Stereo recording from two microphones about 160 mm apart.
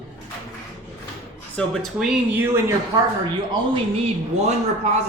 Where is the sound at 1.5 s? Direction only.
5° left (ahead or behind).